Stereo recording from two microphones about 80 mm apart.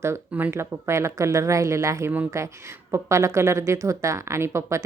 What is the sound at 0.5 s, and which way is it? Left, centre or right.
Speech, right.